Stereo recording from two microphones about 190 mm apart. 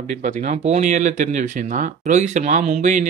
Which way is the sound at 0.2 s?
40° right (ahead or behind).